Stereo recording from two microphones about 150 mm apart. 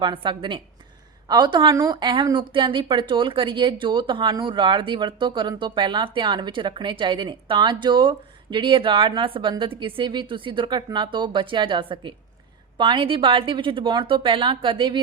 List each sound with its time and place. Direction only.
0.0 s a woman's voice: 35° right (ahead or behind)